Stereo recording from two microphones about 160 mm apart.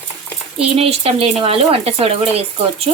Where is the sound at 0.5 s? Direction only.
40° right (ahead or behind).